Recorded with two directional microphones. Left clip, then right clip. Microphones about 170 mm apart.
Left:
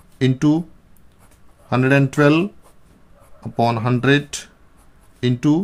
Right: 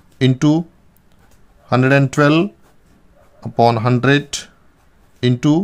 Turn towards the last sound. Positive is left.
turn(degrees=-25)  # may be behind; listen again after turning